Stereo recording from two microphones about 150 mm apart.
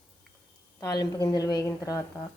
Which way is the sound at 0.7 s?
20° left (ahead or behind).